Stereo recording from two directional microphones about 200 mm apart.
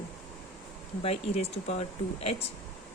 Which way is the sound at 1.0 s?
30° left (ahead or behind).